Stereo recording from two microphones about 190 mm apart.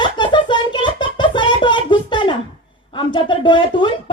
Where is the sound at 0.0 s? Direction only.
25° left (ahead or behind).